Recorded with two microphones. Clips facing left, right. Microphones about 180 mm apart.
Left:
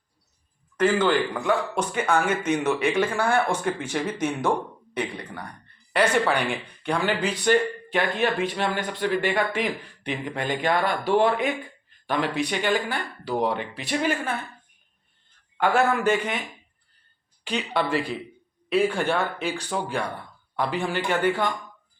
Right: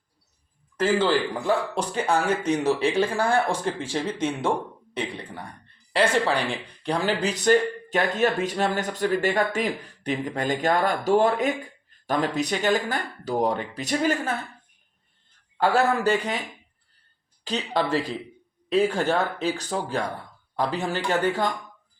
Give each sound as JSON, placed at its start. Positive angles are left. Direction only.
{"t": 0.8, "sound": "speech", "side_deg": -30}
{"t": 15.5, "sound": "speech", "side_deg": -35}
{"t": 17.4, "sound": "speech", "side_deg": -40}